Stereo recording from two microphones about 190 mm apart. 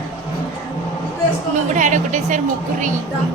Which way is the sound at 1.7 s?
40° right (ahead or behind).